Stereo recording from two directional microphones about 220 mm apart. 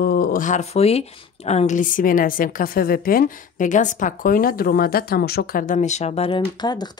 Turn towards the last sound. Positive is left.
turn(degrees=20)  # may be behind; listen again after turning